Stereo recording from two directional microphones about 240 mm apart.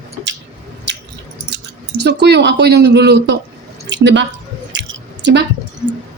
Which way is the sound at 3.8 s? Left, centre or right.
Right.